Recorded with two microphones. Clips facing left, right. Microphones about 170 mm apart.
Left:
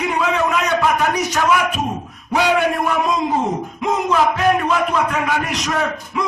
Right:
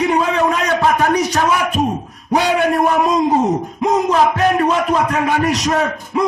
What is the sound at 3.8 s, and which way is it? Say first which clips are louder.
A man's voice: right 3 dB; 40° right (ahead or behind).